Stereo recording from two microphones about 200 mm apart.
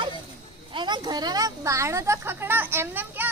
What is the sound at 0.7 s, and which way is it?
Speech, 20° right (ahead or behind).